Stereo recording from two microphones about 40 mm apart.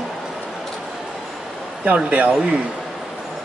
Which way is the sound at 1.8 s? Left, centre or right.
Right.